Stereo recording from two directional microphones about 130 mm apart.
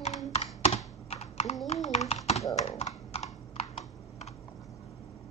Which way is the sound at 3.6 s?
55° left (ahead or behind).